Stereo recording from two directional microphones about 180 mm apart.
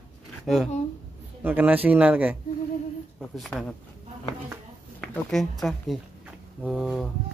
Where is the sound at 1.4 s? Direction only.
10° right (ahead or behind).